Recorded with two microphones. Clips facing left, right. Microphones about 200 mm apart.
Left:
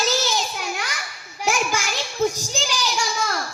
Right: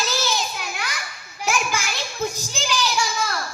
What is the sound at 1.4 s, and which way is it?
Children playing, 45° left (ahead or behind).